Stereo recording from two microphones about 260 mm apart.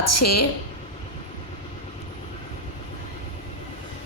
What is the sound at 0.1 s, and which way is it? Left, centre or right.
Speech, left.